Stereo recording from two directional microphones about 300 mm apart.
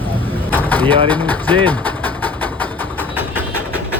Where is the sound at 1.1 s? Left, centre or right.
Centre.